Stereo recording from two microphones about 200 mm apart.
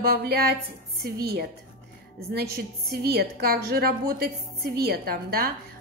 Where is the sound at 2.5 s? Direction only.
50° right (ahead or behind).